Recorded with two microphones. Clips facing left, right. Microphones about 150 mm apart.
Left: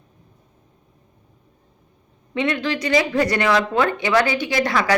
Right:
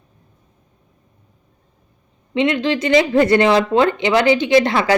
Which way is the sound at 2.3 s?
20° right (ahead or behind).